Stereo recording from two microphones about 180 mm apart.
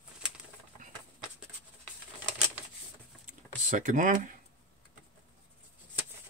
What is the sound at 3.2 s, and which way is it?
Typing, 45° right (ahead or behind).